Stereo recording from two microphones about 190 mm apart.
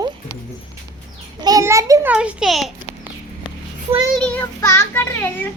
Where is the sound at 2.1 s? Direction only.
5° right (ahead or behind).